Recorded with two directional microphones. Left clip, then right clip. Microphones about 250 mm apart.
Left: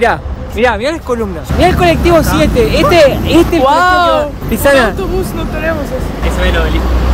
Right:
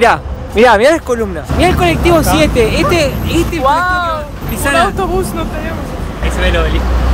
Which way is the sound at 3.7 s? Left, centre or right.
Left.